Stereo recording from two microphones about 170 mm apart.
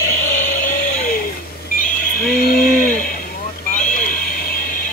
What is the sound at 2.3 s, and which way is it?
Speech, 60° left (ahead or behind).